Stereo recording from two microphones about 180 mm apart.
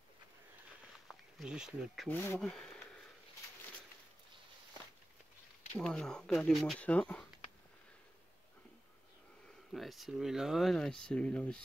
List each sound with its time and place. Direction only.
1.0 s speech: 5° right (ahead or behind)
2.0 s speech: 10° left (ahead or behind)
5.7 s speech: 5° left (ahead or behind)
9.7 s speech: centre (ahead or behind)